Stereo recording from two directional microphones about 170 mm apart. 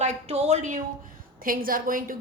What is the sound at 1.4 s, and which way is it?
Speech, 55° right (ahead or behind).